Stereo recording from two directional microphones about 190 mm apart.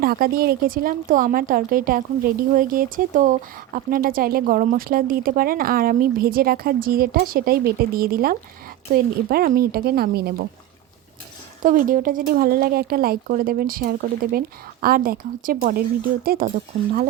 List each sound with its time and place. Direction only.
0.0 s speech: 50° right (ahead or behind)
11.6 s speech: 45° right (ahead or behind)